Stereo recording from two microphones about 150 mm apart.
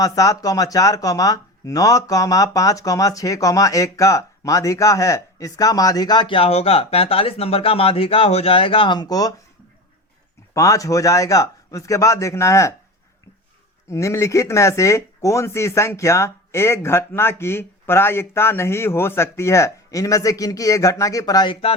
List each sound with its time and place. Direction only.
0.0 s speech: 25° left (ahead or behind)
10.5 s speech: 20° left (ahead or behind)
13.8 s speech: 20° left (ahead or behind); by 21.8 s 35° left (ahead or behind)